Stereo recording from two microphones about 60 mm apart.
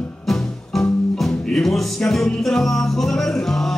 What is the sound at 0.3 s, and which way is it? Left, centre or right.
Music, centre.